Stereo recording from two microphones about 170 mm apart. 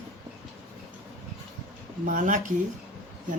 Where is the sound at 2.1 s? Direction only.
50° right (ahead or behind).